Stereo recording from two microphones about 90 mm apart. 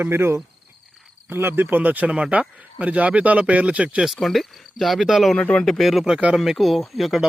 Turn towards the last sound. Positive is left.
turn(degrees=0)  # may be behind; listen again after turning